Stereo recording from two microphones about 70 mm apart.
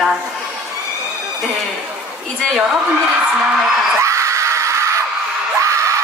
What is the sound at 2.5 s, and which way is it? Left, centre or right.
Music, centre.